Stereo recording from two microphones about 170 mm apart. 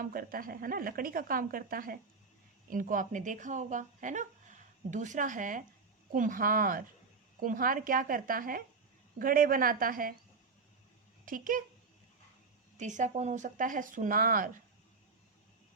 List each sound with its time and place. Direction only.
0.0 s speech: 60° right (ahead or behind)
11.3 s speech: 55° right (ahead or behind)
12.7 s speech: 45° right (ahead or behind)